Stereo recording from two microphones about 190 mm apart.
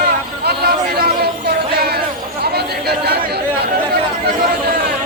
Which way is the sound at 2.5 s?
60° right (ahead or behind).